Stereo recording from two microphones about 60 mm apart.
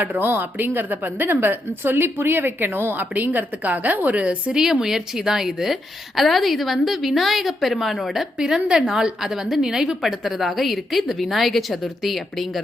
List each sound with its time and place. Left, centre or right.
0.0 s a woman's voice: right
4.6 s a woman's voice: centre